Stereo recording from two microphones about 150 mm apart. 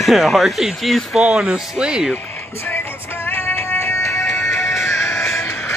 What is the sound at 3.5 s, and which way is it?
Music, 15° left (ahead or behind).